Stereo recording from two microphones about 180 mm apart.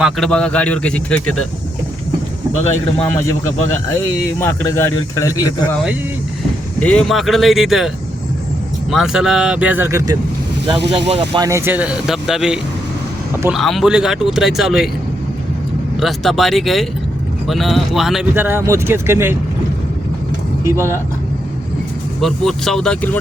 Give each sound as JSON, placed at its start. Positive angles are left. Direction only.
{"t": 0.0, "sound": "speech", "side_deg": 5}
{"t": 2.6, "sound": "speech", "side_deg": 10}
{"t": 5.7, "sound": "speech", "side_deg": -5}
{"t": 6.7, "sound": "speech", "side_deg": 5}
{"t": 8.9, "sound": "speech", "side_deg": 0}
{"t": 11.3, "sound": "speech", "side_deg": -15}
{"t": 16.0, "sound": "speech", "side_deg": 0}
{"t": 18.3, "sound": "speech", "side_deg": -10}
{"t": 20.7, "sound": "speech", "side_deg": -15}
{"t": 22.2, "sound": "speech", "side_deg": 0}